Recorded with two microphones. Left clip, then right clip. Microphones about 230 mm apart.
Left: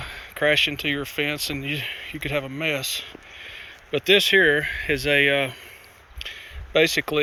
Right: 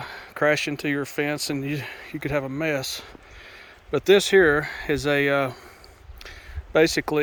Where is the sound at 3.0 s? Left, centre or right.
Right.